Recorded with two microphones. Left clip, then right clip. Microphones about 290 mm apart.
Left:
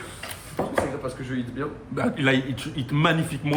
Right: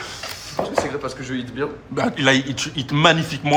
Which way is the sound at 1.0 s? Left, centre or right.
Right.